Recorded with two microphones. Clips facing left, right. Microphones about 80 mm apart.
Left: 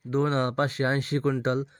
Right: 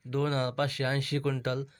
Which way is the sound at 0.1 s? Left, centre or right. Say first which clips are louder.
Left 5 dB; left.